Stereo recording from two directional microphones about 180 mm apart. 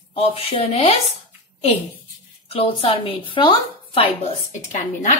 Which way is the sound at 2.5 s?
30° left (ahead or behind).